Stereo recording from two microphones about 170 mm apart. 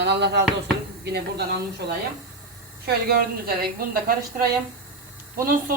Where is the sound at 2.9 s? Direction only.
65° right (ahead or behind).